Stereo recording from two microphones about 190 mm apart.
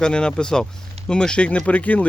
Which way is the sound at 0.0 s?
5° left (ahead or behind).